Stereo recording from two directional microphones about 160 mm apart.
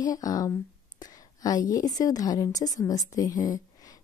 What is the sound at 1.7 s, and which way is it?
A woman's voice, 25° left (ahead or behind).